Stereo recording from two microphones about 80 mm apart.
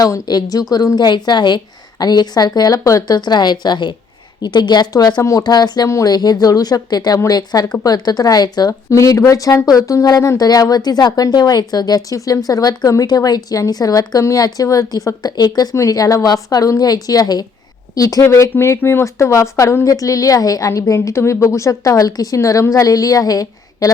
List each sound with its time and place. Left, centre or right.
0.0 s a woman's voice: left
3.2 s a woman's voice: left
8.9 s speech: left
18.5 s speech: left